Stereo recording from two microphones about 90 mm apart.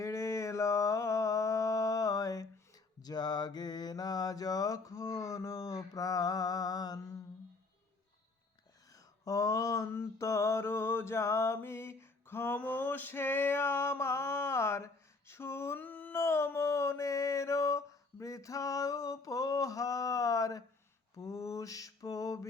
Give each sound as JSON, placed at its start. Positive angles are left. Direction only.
{"t": 0.0, "sound": "mantra", "side_deg": 35}
{"t": 9.2, "sound": "mantra", "side_deg": 40}
{"t": 12.5, "sound": "male singing", "side_deg": 20}
{"t": 15.3, "sound": "a sound", "side_deg": 30}
{"t": 16.2, "sound": "a sound", "side_deg": 30}
{"t": 21.2, "sound": "mantra", "side_deg": 35}